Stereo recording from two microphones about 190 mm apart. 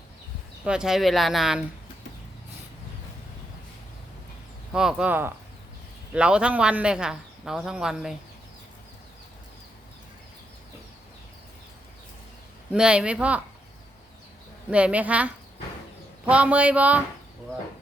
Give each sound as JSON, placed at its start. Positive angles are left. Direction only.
{"t": 0.6, "sound": "a man's voice", "side_deg": -5}
{"t": 4.7, "sound": "a man's voice", "side_deg": -5}
{"t": 12.7, "sound": "a man's voice", "side_deg": -5}
{"t": 14.7, "sound": "speech", "side_deg": -5}